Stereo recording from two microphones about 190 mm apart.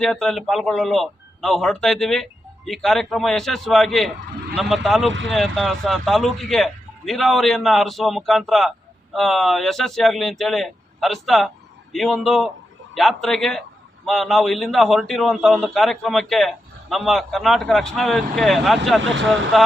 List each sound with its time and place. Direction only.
0.0 s a man's voice: centre (ahead or behind)
19.0 s speech: 80° right
19.5 s a man's voice: centre (ahead or behind)